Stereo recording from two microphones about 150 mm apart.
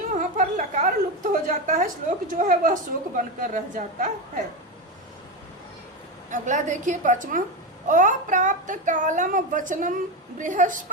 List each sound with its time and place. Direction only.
0.0 s a woman's voice: 60° right (ahead or behind)
6.3 s a woman's voice: 55° right (ahead or behind)